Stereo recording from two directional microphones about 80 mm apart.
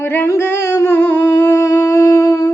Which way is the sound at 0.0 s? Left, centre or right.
Left.